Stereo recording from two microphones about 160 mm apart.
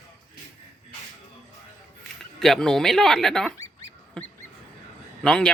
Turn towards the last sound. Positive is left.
turn(degrees=5)  # may be behind; listen again after turning